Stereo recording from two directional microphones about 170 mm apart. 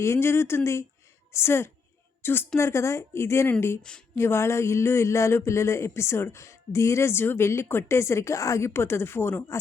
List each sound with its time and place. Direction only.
0.0 s speech: 15° left (ahead or behind)